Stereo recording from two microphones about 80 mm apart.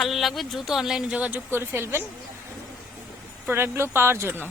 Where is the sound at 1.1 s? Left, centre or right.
Centre.